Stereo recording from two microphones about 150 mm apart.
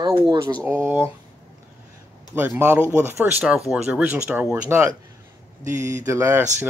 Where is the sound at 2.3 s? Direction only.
10° right (ahead or behind).